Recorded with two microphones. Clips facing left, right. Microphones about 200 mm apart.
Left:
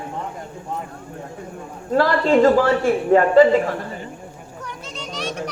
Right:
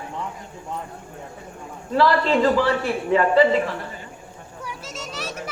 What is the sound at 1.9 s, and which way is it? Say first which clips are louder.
A woman's voice: left 3 dB; 45° left (ahead or behind).